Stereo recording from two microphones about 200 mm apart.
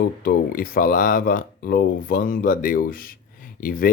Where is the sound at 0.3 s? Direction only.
45° left (ahead or behind).